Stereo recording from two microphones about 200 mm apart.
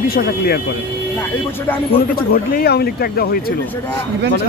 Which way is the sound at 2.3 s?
50° left (ahead or behind).